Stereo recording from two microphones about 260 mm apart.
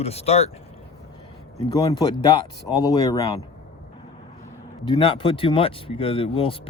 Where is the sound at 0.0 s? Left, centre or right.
Left.